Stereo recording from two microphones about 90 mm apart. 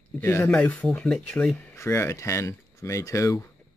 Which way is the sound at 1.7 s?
30° left (ahead or behind).